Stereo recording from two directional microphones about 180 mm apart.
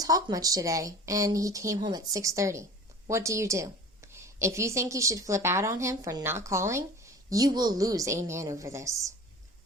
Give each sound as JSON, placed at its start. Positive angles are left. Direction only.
{"t": 0.0, "sound": "a woman's voice", "side_deg": -20}